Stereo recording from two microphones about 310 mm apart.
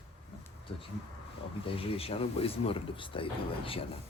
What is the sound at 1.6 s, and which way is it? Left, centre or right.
Speech, centre.